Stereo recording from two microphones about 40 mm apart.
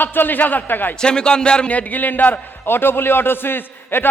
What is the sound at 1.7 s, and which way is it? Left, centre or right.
Speech, left.